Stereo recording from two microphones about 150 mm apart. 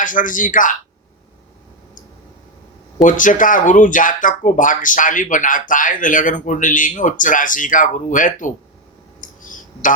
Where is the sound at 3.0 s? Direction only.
60° left (ahead or behind).